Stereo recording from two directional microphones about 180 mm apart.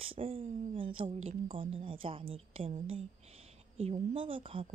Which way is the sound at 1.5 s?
30° right (ahead or behind).